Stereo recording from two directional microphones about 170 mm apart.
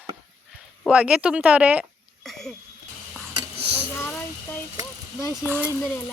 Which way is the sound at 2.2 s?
Centre (ahead or behind).